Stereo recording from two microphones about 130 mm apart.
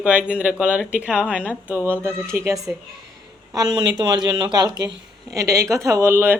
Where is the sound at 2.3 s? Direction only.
20° right (ahead or behind).